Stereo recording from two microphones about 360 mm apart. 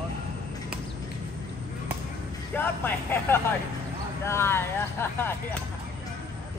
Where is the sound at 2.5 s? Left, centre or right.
Centre.